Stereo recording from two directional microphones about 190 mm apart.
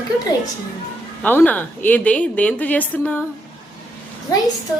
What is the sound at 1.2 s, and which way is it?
A woman's voice, 10° left (ahead or behind).